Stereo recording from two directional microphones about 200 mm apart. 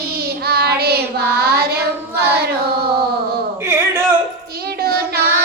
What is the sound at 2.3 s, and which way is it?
Carnatic music, 55° right (ahead or behind).